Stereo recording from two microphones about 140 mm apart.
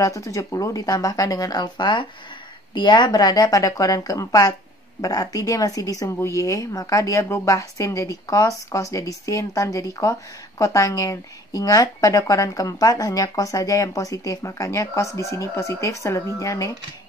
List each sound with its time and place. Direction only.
0.0 s a woman's voice: 25° left (ahead or behind)